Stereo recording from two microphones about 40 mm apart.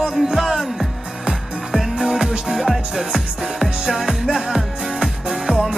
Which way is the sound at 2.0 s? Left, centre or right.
Centre.